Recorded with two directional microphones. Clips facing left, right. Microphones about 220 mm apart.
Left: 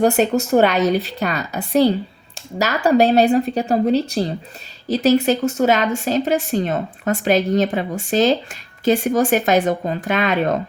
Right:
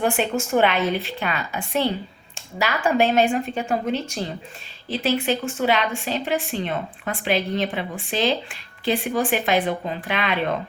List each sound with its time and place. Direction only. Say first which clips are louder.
0.0 s a woman's voice: left 7 dB; 40° left (ahead or behind)